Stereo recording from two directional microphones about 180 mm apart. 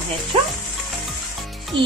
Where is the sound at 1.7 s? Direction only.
30° right (ahead or behind).